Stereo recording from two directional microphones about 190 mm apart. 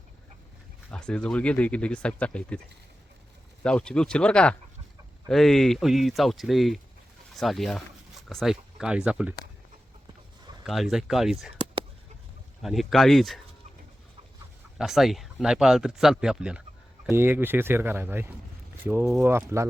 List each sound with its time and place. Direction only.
0.9 s speech: 5° left (ahead or behind)
3.6 s speech: 5° left (ahead or behind)
10.7 s speech: centre (ahead or behind)
11.6 s a sound: 30° right (ahead or behind)
12.6 s speech: centre (ahead or behind)
14.8 s speech: centre (ahead or behind)